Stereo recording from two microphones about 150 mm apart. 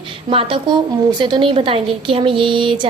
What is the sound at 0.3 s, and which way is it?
A woman's voice, 35° right (ahead or behind).